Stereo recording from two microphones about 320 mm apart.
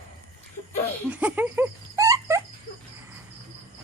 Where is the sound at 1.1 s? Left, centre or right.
Centre.